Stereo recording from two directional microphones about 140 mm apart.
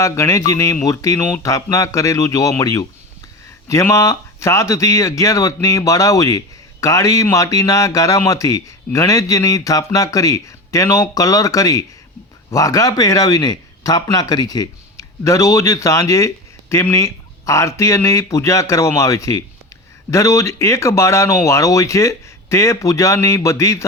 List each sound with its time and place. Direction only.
0.0 s speech: 20° left (ahead or behind)